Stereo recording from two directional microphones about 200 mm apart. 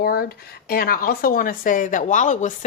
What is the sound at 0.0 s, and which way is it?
A woman's voice, 50° left (ahead or behind).